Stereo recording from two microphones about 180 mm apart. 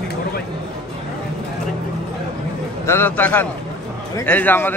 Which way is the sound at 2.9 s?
10° left (ahead or behind).